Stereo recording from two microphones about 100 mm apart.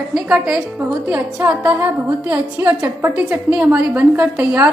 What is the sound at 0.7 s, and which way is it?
A woman's voice, 20° right (ahead or behind).